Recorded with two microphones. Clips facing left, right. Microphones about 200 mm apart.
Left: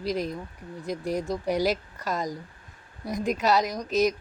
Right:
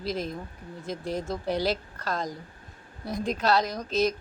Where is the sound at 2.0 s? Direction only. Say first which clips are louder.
Left 2 dB; centre (ahead or behind).